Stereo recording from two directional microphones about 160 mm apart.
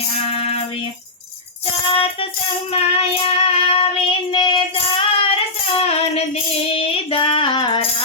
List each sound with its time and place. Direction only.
0.3 s music: 40° left (ahead or behind)
2.7 s child singing: 35° left (ahead or behind)
6.7 s female singing: 35° left (ahead or behind)